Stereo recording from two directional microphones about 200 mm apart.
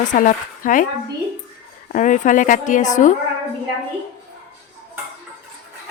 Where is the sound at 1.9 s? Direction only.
40° left (ahead or behind).